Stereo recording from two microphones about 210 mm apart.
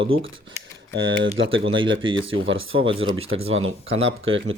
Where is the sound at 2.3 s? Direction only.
70° right (ahead or behind).